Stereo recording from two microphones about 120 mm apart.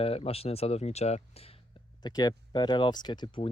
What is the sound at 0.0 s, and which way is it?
Speech, 55° left (ahead or behind).